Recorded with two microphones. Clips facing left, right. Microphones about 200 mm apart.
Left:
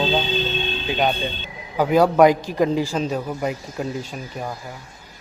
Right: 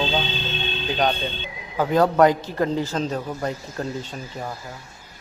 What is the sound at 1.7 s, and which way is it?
Speech, 10° left (ahead or behind).